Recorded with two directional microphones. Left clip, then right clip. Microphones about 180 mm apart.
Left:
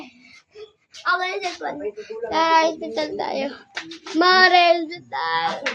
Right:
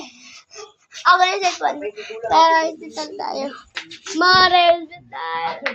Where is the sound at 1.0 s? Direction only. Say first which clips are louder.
Right 8 dB; 15° left (ahead or behind).